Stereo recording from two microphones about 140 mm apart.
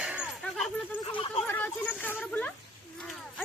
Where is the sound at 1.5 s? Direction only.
15° left (ahead or behind).